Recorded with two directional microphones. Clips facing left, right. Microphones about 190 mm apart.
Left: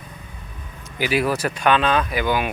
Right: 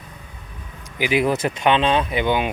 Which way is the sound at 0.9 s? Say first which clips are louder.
Right 1 dB; 20° right (ahead or behind).